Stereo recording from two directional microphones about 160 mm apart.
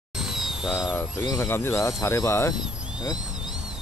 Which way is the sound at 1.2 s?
20° left (ahead or behind).